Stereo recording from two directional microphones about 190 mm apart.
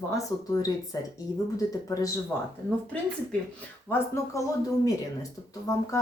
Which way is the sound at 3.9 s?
15° left (ahead or behind).